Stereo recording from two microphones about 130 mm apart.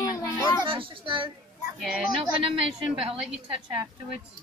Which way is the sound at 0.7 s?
40° right (ahead or behind).